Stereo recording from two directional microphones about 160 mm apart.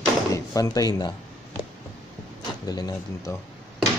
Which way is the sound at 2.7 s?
25° left (ahead or behind).